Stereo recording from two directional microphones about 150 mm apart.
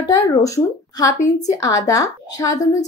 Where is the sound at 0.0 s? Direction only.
25° left (ahead or behind).